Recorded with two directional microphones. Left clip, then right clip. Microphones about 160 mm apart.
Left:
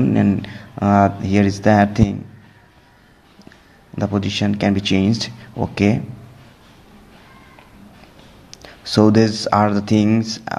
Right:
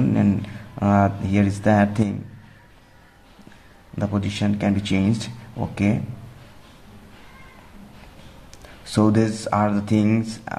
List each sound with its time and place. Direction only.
0.1 s speech: 25° left (ahead or behind)
0.7 s speech: 15° left (ahead or behind)
3.9 s speech: 20° left (ahead or behind)
8.8 s speech: 20° left (ahead or behind)
10.0 s speech: 10° left (ahead or behind)